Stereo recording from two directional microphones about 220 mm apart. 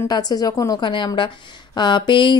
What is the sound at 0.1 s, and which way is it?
A woman's voice, 15° left (ahead or behind).